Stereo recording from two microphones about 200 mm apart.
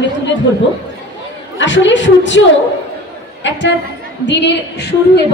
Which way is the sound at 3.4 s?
65° left (ahead or behind).